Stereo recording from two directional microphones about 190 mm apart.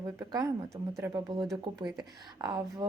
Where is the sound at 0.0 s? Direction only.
20° right (ahead or behind).